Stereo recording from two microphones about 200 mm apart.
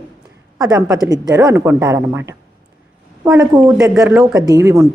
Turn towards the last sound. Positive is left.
turn(degrees=-15)  # may be behind; listen again after turning